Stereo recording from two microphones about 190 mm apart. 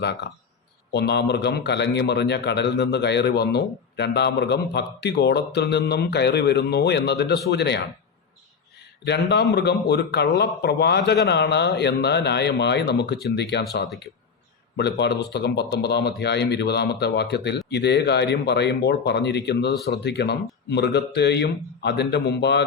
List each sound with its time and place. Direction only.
0.0 s a man's voice: 60° left (ahead or behind)
9.3 s a man's voice: 65° left (ahead or behind)